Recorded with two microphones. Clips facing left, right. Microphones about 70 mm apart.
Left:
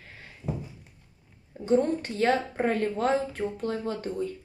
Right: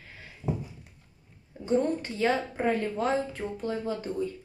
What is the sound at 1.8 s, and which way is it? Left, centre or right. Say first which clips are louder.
A woman's voice: left 1 dB; left.